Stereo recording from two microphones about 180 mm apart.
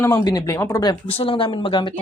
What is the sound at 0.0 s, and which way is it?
Speech, 20° left (ahead or behind).